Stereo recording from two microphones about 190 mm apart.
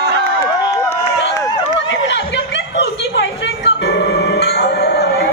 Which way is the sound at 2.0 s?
65° left (ahead or behind).